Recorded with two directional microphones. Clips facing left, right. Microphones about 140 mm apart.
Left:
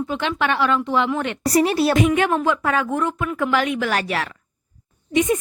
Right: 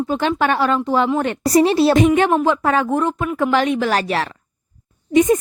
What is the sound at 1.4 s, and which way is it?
A woman's voice, 25° right (ahead or behind).